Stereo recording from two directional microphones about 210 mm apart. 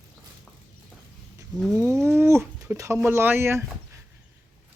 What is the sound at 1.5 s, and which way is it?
Cat, centre (ahead or behind).